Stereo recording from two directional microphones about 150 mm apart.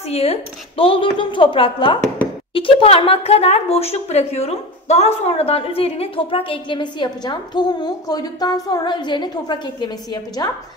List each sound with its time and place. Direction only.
0.1 s a woman's voice: 45° left (ahead or behind)